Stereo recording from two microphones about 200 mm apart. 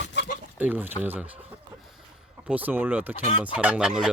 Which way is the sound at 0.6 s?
10° right (ahead or behind).